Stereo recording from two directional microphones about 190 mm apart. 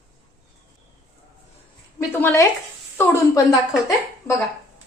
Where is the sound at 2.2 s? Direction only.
10° left (ahead or behind).